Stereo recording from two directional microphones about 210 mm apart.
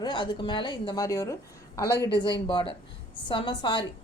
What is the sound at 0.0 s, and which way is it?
A woman's voice, 20° left (ahead or behind).